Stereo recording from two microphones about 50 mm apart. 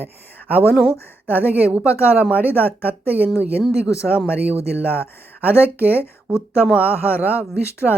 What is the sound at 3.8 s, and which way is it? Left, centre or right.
Speech, left.